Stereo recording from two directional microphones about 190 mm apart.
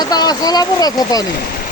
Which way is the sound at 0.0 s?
20° left (ahead or behind).